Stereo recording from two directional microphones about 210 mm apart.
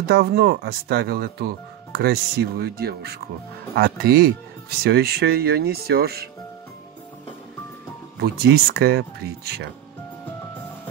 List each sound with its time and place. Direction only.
0.0 s speech: 50° right (ahead or behind)
8.2 s speech: 50° right (ahead or behind)